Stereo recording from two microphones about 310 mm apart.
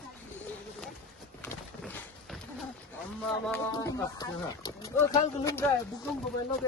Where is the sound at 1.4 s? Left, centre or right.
Centre.